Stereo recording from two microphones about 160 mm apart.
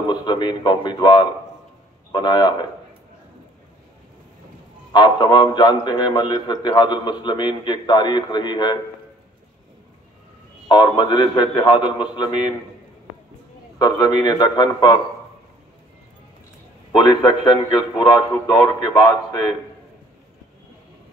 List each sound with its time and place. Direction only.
0.1 s a man's voice: 30° left (ahead or behind)
4.9 s a man's voice: 30° left (ahead or behind)
10.7 s a man's voice: 30° left (ahead or behind)
13.7 s a man's voice: 25° left (ahead or behind)
17.1 s a man's voice: 30° left (ahead or behind)